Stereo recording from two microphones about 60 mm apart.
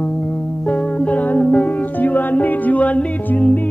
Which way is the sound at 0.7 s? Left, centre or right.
Centre.